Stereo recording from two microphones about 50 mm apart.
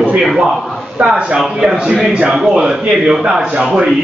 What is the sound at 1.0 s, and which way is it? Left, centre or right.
A man's voice, right.